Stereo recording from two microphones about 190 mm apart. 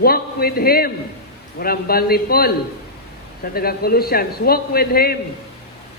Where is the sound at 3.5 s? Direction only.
55° left (ahead or behind).